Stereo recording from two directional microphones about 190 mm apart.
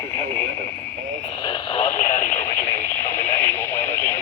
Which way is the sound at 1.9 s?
45° left (ahead or behind).